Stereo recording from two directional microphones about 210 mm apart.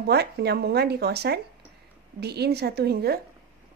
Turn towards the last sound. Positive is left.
turn(degrees=-50)  # may be behind; listen again after turning